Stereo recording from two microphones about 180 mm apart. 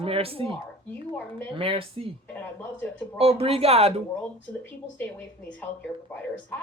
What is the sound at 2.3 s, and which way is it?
Speech, 10° left (ahead or behind).